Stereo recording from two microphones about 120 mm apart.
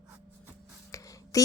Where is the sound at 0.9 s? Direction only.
30° left (ahead or behind).